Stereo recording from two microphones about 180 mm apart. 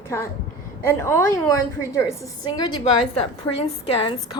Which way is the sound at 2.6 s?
25° left (ahead or behind).